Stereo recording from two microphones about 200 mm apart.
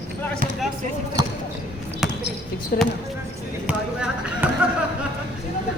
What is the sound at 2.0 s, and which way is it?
Basketball bounce, centre (ahead or behind).